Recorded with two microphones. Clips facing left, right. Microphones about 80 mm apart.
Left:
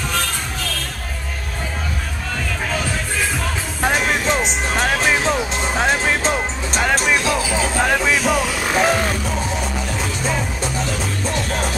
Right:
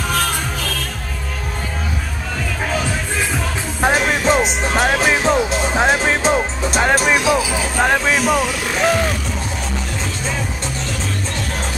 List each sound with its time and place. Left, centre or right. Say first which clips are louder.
3.9 s music: right 3 dB; centre
8.1 s vehicle: right 2 dB; centre
8.6 s a sound: left 2 dB; centre